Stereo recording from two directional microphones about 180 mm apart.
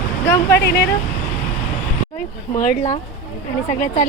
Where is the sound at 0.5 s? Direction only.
65° left (ahead or behind).